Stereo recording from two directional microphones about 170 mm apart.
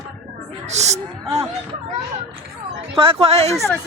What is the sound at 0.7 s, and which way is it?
Music, 40° right (ahead or behind).